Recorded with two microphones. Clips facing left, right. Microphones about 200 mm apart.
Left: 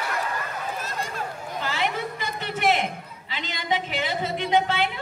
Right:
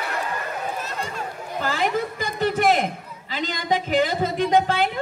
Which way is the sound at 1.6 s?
45° right (ahead or behind).